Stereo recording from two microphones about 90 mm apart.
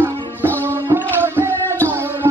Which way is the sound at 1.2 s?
25° right (ahead or behind).